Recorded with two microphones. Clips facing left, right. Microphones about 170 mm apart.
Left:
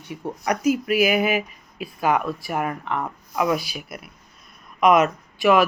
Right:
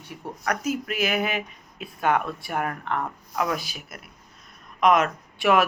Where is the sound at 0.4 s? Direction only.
10° left (ahead or behind).